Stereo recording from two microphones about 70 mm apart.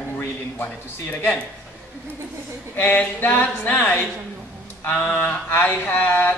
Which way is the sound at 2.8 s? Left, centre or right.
Left.